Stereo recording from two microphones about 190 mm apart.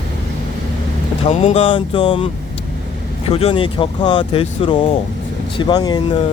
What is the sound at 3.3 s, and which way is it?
Speech, 30° left (ahead or behind).